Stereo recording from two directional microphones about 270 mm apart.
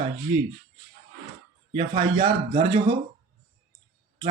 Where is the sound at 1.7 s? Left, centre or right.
Right.